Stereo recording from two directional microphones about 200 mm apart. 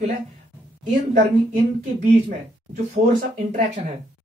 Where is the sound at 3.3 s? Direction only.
40° right (ahead or behind).